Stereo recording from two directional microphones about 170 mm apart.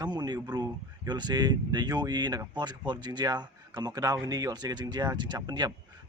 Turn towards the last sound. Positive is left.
turn(degrees=-25)  # may be behind; listen again after turning